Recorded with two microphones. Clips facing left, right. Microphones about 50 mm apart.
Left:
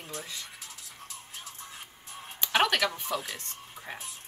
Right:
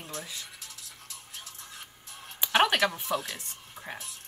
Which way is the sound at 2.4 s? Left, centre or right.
Centre.